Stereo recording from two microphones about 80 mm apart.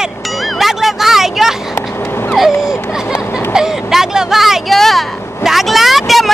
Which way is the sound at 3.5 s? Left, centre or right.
Centre.